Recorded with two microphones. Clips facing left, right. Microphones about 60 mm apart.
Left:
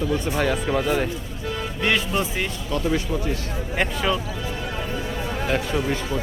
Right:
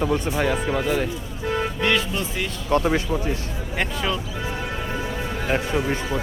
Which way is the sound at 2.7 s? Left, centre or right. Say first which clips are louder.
Right 4 dB; right.